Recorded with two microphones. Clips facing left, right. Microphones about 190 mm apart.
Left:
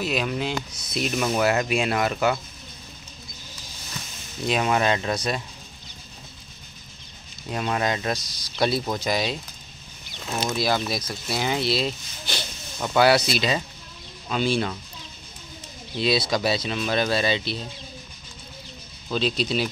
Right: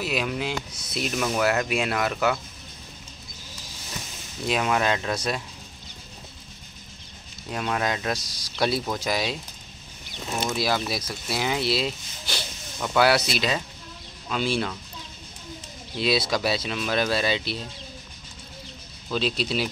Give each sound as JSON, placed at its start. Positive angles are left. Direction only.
{"t": 0.0, "sound": "speech", "side_deg": -5}
{"t": 4.5, "sound": "speech", "side_deg": 0}
{"t": 7.5, "sound": "speech", "side_deg": 5}
{"t": 8.2, "sound": "speech", "side_deg": -30}
{"t": 8.5, "sound": "speech", "side_deg": -5}
{"t": 10.5, "sound": "speech", "side_deg": -5}
{"t": 16.0, "sound": "speech", "side_deg": -5}
{"t": 19.1, "sound": "speech", "side_deg": -5}